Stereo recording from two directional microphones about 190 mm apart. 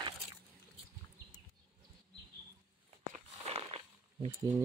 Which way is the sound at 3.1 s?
35° right (ahead or behind).